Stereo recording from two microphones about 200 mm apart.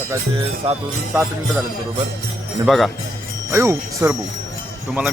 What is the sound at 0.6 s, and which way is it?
Music, 30° right (ahead or behind).